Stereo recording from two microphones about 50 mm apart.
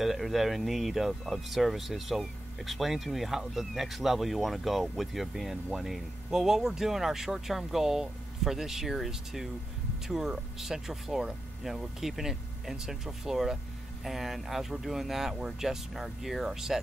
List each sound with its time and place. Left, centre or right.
0.0 s speech: centre